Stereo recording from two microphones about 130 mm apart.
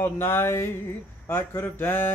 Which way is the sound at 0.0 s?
15° left (ahead or behind).